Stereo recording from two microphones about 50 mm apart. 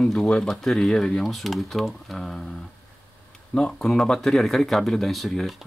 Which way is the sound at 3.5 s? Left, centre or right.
Centre.